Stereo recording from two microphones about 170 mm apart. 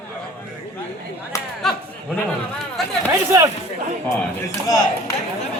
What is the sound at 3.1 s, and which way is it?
Speech, 20° right (ahead or behind).